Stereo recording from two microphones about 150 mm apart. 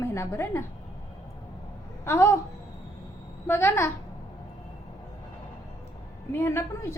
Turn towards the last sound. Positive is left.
turn(degrees=15)  # may be behind; listen again after turning